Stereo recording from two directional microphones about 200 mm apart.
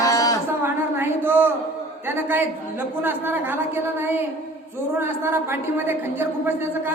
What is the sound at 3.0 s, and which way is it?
Speech, 10° right (ahead or behind).